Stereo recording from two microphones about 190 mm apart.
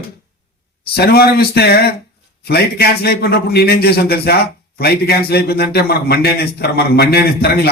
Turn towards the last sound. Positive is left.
turn(degrees=55)  # may be behind; listen again after turning